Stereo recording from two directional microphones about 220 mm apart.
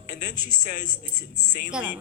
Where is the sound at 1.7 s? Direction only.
5° right (ahead or behind).